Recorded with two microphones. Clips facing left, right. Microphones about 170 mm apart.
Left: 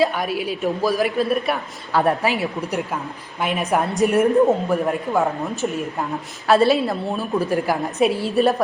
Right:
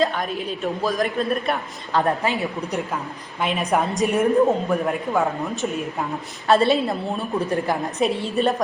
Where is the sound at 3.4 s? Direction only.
Centre (ahead or behind).